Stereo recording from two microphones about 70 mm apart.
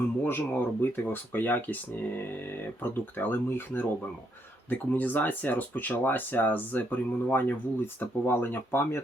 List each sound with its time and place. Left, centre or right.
0.3 s speech: left